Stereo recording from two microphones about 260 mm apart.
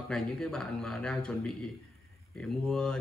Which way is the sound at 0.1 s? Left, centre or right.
Centre.